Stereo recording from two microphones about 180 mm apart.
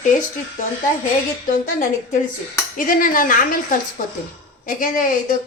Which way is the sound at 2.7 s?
50° left (ahead or behind).